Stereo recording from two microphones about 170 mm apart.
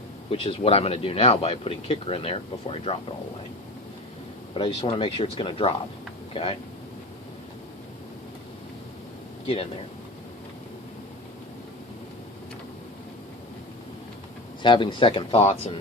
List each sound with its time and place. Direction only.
0.3 s speech: 35° left (ahead or behind)
4.5 s speech: 30° left (ahead or behind)
14.6 s speech: 30° left (ahead or behind)